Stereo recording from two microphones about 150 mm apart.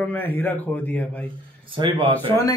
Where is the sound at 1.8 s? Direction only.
35° right (ahead or behind).